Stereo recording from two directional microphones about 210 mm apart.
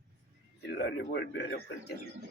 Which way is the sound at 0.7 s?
55° left (ahead or behind).